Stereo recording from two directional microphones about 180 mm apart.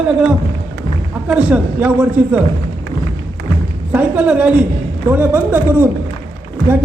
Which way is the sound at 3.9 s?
5° right (ahead or behind).